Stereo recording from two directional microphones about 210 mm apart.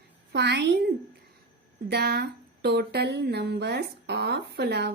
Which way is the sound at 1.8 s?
50° right (ahead or behind).